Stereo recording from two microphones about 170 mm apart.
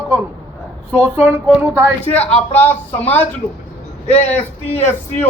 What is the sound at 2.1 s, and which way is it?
A man's voice, 10° left (ahead or behind).